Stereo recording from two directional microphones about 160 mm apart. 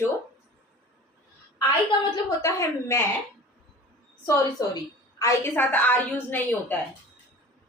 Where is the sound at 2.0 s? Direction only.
25° left (ahead or behind).